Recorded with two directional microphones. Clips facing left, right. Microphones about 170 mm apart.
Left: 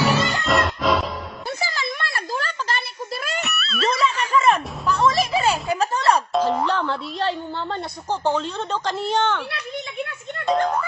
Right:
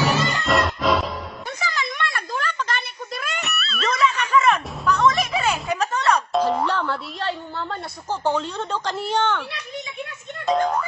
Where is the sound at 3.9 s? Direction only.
30° left (ahead or behind).